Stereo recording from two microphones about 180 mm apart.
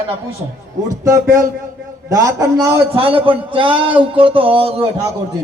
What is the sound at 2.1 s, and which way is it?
Speech, 20° right (ahead or behind).